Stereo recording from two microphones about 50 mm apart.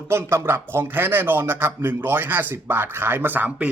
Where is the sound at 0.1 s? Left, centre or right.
Right.